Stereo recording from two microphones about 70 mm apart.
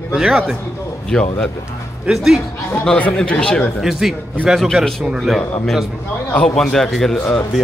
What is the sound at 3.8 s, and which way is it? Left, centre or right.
Speech, centre.